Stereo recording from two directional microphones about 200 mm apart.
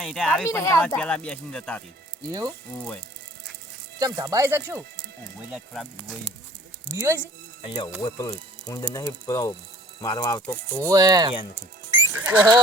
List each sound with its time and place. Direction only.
0.0 s speech: centre (ahead or behind)
0.4 s speech: 15° left (ahead or behind)
4.0 s speech: 15° right (ahead or behind)
5.5 s speech: centre (ahead or behind)
6.9 s speech: 15° right (ahead or behind)
7.6 s speech: 25° left (ahead or behind)
10.8 s speech: 15° right (ahead or behind)
11.9 s music: 10° right (ahead or behind)